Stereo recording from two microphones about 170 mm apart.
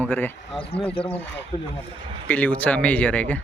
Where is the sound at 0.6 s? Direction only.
35° left (ahead or behind).